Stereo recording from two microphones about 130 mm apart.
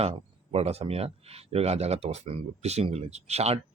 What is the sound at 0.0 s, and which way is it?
Speech, 50° right (ahead or behind).